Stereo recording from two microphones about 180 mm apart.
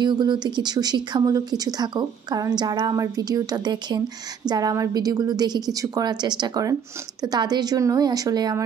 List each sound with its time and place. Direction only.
0.0 s a woman's voice: 25° right (ahead or behind)